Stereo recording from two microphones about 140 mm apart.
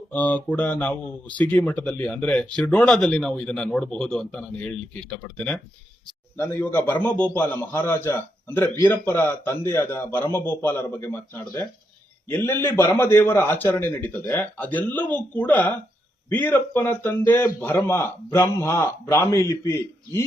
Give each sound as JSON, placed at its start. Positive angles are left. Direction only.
{"t": 0.1, "sound": "a man's voice", "side_deg": 10}